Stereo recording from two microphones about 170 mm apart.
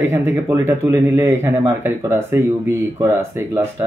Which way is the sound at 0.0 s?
15° right (ahead or behind).